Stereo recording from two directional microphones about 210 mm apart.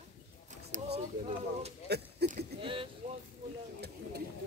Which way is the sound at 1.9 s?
50° right (ahead or behind).